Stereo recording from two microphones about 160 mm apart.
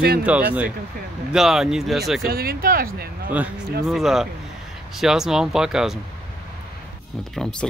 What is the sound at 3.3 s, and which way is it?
Speech, 10° right (ahead or behind).